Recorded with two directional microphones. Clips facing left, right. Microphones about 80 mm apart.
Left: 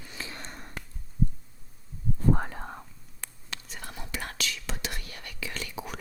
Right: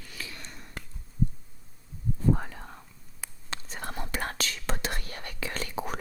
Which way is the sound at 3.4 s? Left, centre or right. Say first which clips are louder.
Right 5 dB; right.